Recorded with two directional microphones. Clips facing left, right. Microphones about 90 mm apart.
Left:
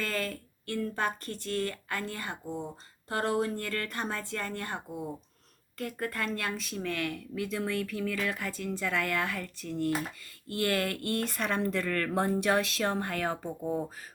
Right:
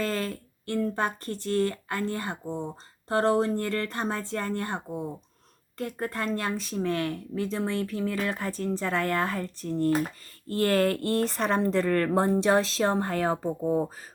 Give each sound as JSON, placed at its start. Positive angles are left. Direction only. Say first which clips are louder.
{"t": 0.0, "sound": "speech", "louder": "right 4 dB", "side_deg": -35}